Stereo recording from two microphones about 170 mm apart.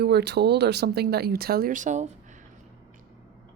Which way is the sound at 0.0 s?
75° right (ahead or behind).